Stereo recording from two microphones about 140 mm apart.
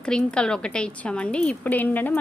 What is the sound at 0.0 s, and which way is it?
A woman's voice, 5° left (ahead or behind).